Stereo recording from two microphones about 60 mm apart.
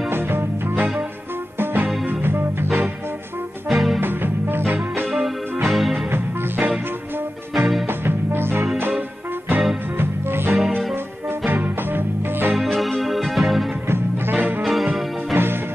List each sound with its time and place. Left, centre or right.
0.1 s music: right
3.6 s music: centre
4.0 s music: right
5.7 s music: centre
6.0 s music: right
7.5 s music: centre
7.8 s music: right
9.9 s music: right
12.5 s music: centre
13.8 s music: right
14.6 s music: centre
15.3 s music: right